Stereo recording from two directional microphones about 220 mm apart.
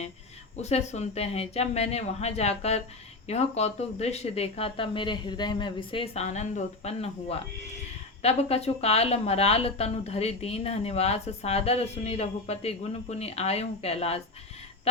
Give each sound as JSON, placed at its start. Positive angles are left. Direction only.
{"t": 0.5, "sound": "speech", "side_deg": 30}